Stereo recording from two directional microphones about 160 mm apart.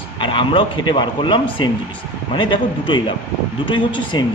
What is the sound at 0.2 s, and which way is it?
A man's voice, 30° left (ahead or behind).